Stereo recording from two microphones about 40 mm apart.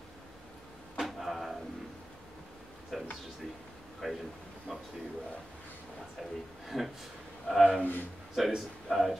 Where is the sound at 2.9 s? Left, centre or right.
Centre.